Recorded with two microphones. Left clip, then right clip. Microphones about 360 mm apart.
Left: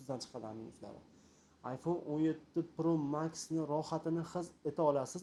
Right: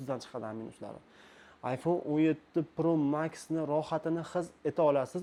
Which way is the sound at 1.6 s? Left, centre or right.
Right.